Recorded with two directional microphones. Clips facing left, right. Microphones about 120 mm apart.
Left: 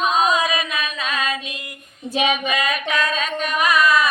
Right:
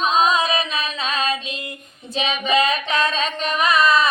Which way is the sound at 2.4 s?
25° right (ahead or behind).